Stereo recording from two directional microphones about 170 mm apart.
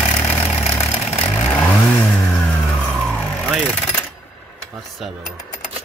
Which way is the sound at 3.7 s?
10° left (ahead or behind).